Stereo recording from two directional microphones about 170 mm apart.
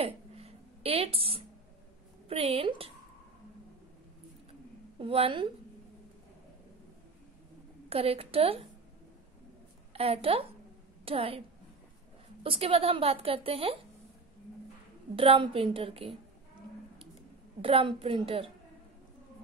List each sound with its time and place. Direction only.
0.0 s a sound: 35° right (ahead or behind)
2.2 s a woman's voice: 35° right (ahead or behind)
4.5 s a sound: 30° right (ahead or behind)
7.9 s a woman's voice: 35° right (ahead or behind)
9.9 s a woman's voice: 35° right (ahead or behind)
12.4 s a woman's voice: 35° right (ahead or behind)
15.1 s a woman's voice: 30° right (ahead or behind)
17.6 s a woman's voice: 30° right (ahead or behind)